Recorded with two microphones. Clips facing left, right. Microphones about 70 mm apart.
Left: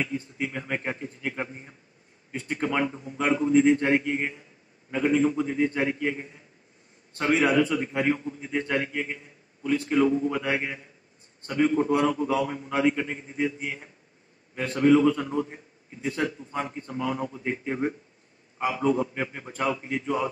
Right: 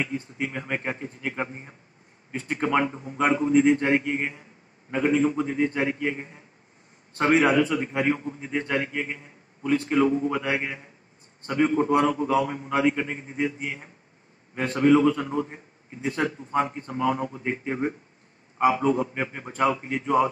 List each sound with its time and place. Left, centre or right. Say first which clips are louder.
0.0 s a man's voice: right 1 dB; right
2.3 s speech: right 2 dB; right
2.6 s a man's voice: right 3 dB; right